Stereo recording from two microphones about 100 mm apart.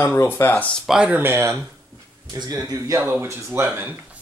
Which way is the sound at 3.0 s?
25° right (ahead or behind).